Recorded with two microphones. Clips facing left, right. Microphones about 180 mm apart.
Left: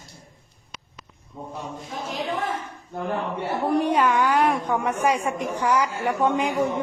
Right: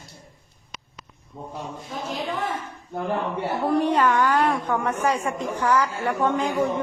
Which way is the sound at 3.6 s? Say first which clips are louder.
Even; 10° left (ahead or behind).